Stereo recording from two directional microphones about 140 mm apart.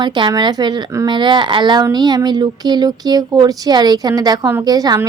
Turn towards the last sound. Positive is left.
turn(degrees=-30)  # may be behind; listen again after turning